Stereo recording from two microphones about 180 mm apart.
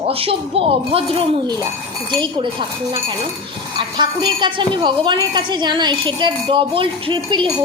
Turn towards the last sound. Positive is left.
turn(degrees=-25)  # may be behind; listen again after turning